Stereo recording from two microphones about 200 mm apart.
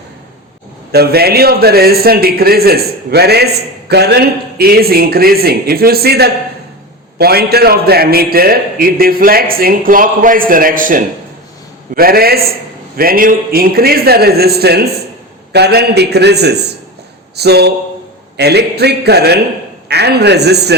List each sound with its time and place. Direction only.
0.9 s a man's voice: 50° right (ahead or behind)